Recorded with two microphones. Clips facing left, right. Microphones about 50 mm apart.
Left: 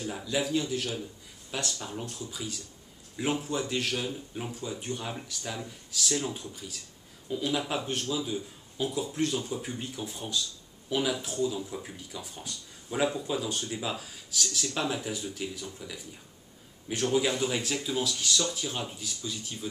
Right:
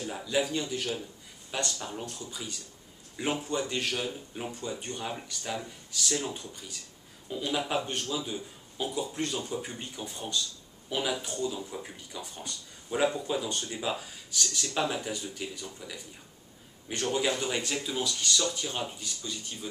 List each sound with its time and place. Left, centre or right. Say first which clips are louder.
0.0 s speech: right 1 dB; centre
4.5 s speech: even; centre